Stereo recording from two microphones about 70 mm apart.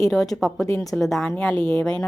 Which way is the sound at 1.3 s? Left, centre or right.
Left.